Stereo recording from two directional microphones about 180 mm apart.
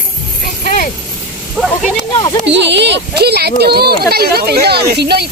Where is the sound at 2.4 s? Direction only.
80° right.